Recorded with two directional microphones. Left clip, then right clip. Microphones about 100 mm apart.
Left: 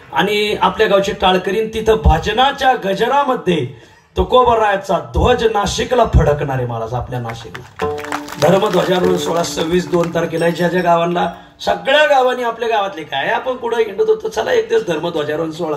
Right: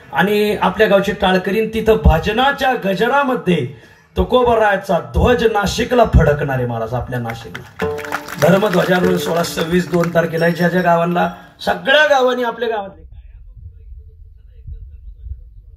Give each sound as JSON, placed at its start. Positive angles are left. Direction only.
{"t": 0.1, "sound": "speech", "side_deg": 20}
{"t": 8.5, "sound": "speech", "side_deg": 25}